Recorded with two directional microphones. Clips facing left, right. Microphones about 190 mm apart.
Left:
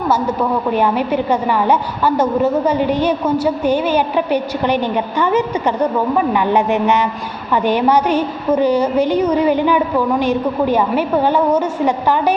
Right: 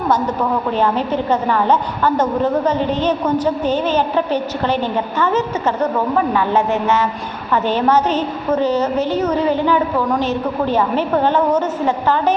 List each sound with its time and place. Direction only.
0.1 s a woman's voice: 10° left (ahead or behind)